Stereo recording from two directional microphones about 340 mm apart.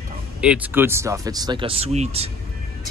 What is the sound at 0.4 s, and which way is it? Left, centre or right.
A woman's voice, centre.